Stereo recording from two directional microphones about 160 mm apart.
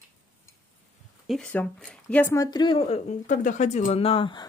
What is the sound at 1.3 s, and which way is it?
Speech, 5° left (ahead or behind).